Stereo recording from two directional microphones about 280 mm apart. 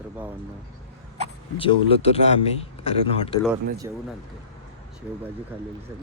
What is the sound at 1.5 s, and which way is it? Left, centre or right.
A man's voice, centre.